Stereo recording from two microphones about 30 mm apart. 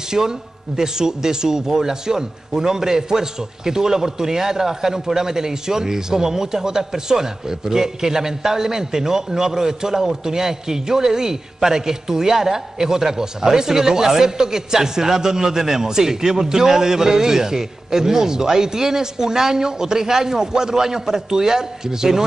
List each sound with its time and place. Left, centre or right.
0.1 s a man's voice: centre